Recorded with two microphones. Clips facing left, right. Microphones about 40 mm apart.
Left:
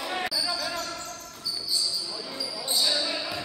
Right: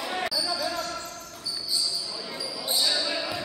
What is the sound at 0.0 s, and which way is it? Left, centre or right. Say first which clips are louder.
Basketball bounce: even; centre.